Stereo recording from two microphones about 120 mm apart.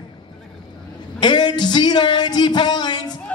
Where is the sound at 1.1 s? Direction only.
40° left (ahead or behind).